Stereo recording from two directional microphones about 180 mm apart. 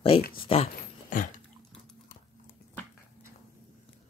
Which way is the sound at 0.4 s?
30° left (ahead or behind).